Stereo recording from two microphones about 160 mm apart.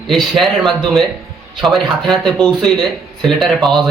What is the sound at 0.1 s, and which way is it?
Speech, centre (ahead or behind).